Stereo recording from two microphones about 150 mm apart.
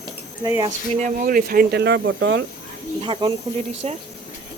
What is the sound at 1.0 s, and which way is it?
Speech, 60° right (ahead or behind).